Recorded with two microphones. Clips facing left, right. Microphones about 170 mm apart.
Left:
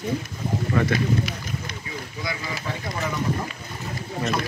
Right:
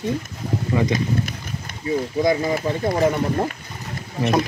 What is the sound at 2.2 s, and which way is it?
Speech, 45° right (ahead or behind).